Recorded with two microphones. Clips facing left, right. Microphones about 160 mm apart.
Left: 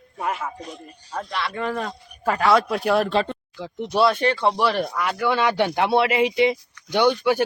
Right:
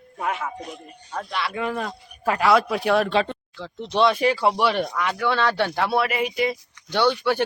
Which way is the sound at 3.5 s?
15° left (ahead or behind).